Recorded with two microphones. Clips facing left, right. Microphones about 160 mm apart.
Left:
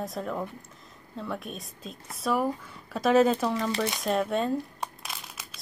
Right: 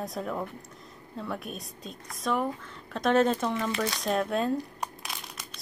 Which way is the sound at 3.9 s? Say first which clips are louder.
Even; centre (ahead or behind).